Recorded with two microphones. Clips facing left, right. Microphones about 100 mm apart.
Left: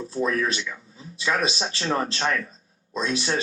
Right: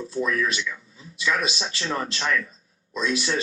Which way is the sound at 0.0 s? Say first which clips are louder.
Left 1 dB; 30° left (ahead or behind).